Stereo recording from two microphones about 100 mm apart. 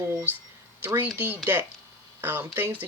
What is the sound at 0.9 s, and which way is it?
Speech, 20° right (ahead or behind).